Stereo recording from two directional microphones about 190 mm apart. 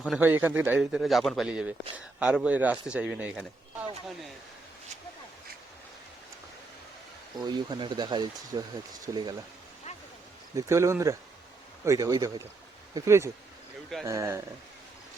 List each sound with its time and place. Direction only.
0.0 s a man's voice: 5° right (ahead or behind)
7.4 s speech: 20° right (ahead or behind)
10.7 s speech: 15° right (ahead or behind)